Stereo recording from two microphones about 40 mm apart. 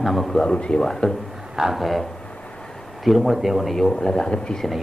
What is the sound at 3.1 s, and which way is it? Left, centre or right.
Speech, centre.